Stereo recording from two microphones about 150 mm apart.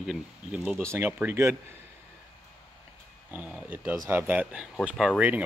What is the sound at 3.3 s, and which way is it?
Speech, 10° right (ahead or behind).